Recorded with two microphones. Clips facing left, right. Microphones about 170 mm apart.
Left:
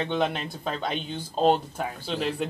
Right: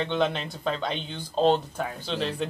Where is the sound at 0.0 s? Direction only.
5° left (ahead or behind).